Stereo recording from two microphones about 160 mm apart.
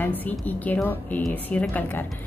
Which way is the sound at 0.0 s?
10° left (ahead or behind).